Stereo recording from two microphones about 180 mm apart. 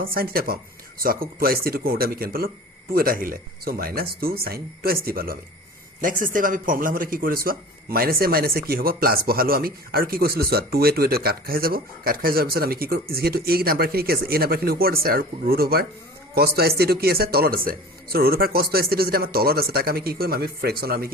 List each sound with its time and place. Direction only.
0.0 s a man's voice: 55° right (ahead or behind)